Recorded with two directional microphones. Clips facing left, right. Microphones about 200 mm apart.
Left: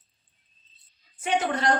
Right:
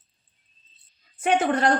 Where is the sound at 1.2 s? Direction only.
55° right (ahead or behind).